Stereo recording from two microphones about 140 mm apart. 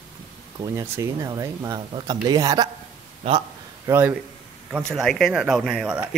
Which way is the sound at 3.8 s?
20° right (ahead or behind).